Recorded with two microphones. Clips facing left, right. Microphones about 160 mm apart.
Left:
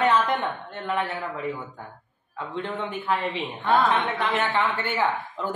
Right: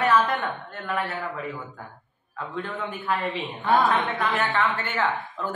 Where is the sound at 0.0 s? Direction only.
20° left (ahead or behind).